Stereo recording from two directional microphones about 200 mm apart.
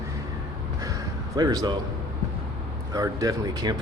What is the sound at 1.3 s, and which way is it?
Speech, 20° right (ahead or behind).